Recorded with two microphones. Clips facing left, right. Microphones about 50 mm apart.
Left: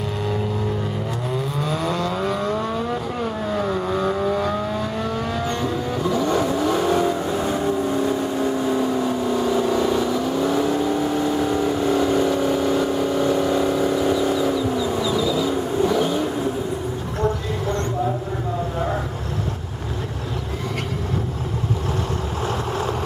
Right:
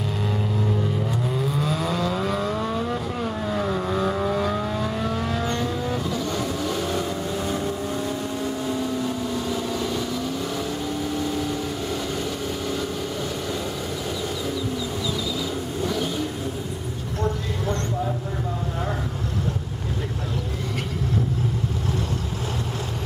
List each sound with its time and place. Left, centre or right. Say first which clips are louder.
1.6 s vehicle: left 3 dB; centre